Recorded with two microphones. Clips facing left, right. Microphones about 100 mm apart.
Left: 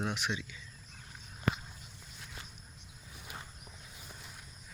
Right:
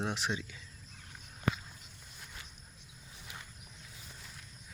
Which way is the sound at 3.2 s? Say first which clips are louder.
Left 3 dB; 25° left (ahead or behind).